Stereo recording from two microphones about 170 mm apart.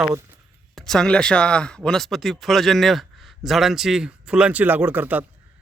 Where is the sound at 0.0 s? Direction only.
15° right (ahead or behind).